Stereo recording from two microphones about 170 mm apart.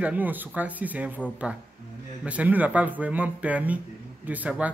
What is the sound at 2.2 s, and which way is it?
Speech, 10° right (ahead or behind).